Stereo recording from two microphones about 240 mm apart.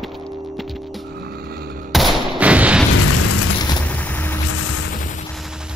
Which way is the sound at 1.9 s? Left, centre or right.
Centre.